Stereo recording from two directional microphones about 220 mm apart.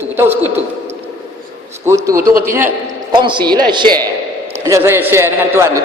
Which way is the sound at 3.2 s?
20° right (ahead or behind).